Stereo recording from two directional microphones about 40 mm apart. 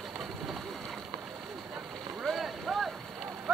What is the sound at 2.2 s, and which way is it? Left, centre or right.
Vehicle, centre.